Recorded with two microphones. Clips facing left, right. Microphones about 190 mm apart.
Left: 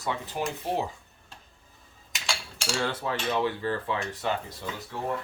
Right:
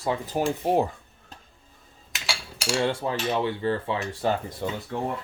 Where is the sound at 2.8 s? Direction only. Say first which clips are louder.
Right 4 dB; 25° right (ahead or behind).